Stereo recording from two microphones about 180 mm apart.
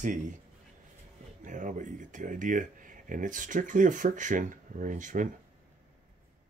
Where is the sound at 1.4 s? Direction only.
45° right (ahead or behind).